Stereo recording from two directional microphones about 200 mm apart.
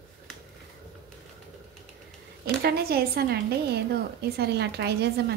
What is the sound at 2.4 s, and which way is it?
A woman's voice, 50° right (ahead or behind).